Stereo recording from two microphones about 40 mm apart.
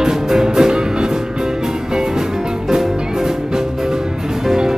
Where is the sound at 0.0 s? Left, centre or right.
Centre.